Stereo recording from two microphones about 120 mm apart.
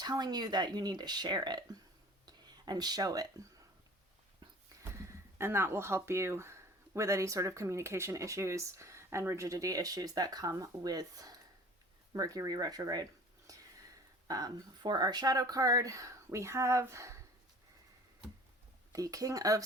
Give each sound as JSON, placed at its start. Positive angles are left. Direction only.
{"t": 0.0, "sound": "speech", "side_deg": -35}
{"t": 2.2, "sound": "a sound", "side_deg": -35}
{"t": 4.8, "sound": "speech", "side_deg": -25}
{"t": 18.9, "sound": "speech", "side_deg": -30}